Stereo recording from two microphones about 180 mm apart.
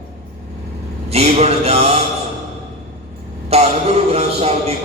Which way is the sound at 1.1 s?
35° right (ahead or behind).